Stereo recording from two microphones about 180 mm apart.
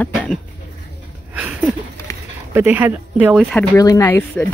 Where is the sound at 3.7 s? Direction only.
20° left (ahead or behind).